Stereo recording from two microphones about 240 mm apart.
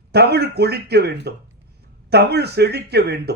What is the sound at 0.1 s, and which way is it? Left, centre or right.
A man's voice, right.